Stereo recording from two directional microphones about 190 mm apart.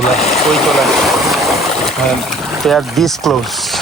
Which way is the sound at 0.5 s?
Centre (ahead or behind).